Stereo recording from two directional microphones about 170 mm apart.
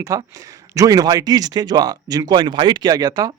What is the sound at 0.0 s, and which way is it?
Speech, 20° right (ahead or behind).